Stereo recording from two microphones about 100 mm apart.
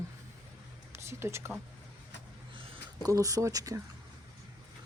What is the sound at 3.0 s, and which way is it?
Speech, 35° right (ahead or behind).